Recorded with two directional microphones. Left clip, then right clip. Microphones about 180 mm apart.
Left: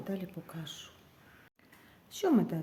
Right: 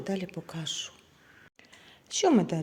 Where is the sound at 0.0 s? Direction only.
35° right (ahead or behind).